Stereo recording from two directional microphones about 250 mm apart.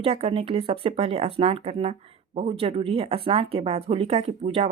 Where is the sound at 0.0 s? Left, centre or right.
Right.